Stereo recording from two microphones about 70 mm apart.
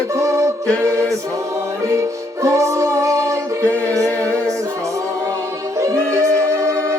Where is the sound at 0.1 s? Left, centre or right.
Right.